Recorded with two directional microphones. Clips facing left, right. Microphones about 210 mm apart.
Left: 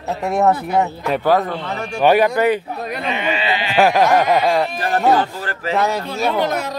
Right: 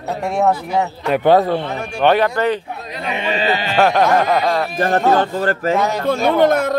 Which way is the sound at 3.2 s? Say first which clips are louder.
Right 5 dB; 35° right (ahead or behind).